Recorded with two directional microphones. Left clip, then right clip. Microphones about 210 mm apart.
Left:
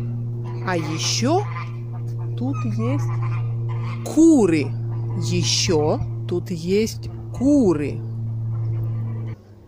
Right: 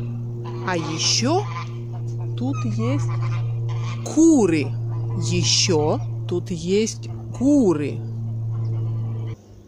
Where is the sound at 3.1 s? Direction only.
35° right (ahead or behind).